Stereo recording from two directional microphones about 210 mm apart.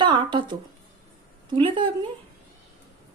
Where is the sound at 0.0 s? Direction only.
20° right (ahead or behind).